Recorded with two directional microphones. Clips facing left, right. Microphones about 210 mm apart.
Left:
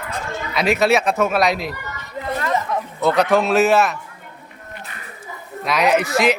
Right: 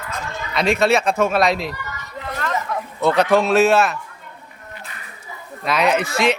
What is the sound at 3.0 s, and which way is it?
Speech, centre (ahead or behind).